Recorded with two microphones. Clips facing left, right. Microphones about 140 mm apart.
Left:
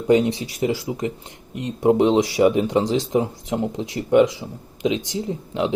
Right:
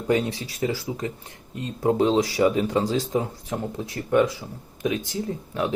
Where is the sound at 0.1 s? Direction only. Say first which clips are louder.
Left 6 dB; 20° left (ahead or behind).